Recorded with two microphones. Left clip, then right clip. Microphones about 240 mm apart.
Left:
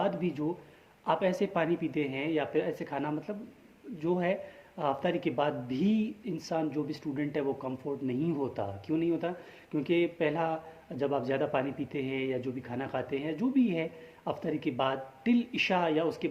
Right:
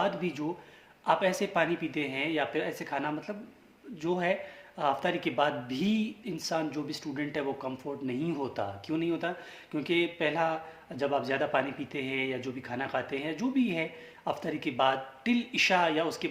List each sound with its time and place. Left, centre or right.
0.0 s speech: centre